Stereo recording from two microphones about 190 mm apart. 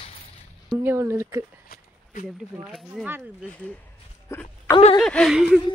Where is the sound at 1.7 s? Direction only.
50° left (ahead or behind).